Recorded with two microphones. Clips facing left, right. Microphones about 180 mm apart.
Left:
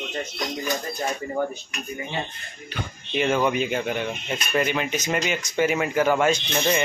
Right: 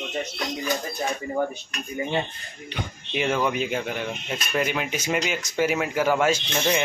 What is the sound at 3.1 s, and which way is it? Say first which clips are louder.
Speech: left 2 dB; centre (ahead or behind).